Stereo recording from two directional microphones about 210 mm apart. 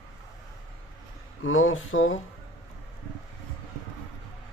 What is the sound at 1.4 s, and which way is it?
Speech, 70° left (ahead or behind).